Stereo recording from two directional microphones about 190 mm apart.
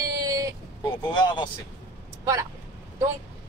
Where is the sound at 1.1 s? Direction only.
25° left (ahead or behind).